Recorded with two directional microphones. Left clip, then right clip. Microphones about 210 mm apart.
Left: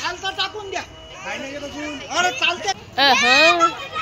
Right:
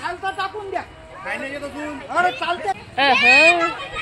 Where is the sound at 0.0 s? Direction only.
45° right (ahead or behind).